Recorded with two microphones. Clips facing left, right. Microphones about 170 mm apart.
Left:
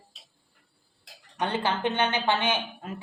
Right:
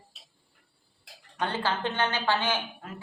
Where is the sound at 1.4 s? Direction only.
20° left (ahead or behind).